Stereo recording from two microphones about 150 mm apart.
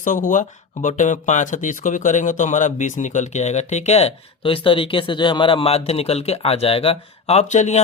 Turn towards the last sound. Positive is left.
turn(degrees=50)  # may be behind; listen again after turning